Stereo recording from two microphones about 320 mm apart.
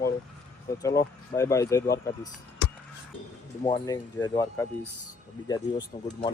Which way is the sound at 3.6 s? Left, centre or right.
Centre.